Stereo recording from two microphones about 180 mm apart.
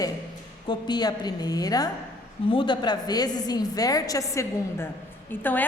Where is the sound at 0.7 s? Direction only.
25° left (ahead or behind).